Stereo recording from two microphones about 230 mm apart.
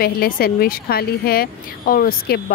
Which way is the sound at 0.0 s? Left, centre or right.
Left.